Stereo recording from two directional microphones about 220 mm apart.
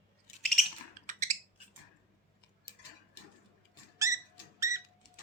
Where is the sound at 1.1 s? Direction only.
35° right (ahead or behind).